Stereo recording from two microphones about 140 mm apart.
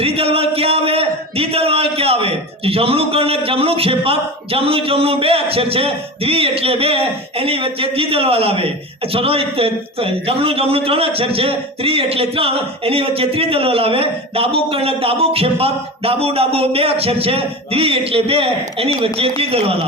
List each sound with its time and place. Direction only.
0.0 s a man's voice: 45° right (ahead or behind)